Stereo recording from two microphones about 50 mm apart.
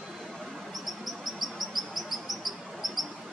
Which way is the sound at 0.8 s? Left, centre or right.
Centre.